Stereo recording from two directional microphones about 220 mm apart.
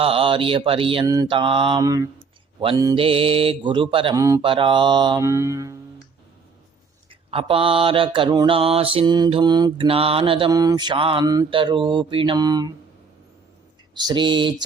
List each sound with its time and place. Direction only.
0.0 s mantra: 25° right (ahead or behind)
7.1 s mantra: 25° right (ahead or behind)
13.9 s mantra: 20° right (ahead or behind)